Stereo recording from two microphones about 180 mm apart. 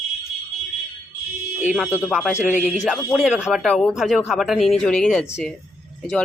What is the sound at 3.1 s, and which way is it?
Speech, centre (ahead or behind).